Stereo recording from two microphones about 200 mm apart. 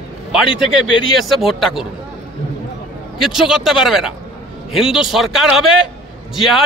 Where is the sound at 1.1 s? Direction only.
Centre (ahead or behind).